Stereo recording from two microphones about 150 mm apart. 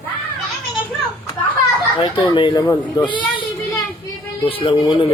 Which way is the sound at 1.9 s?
35° left (ahead or behind).